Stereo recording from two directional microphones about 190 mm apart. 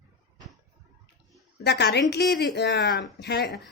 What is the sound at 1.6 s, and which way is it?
A woman's voice, 60° left (ahead or behind).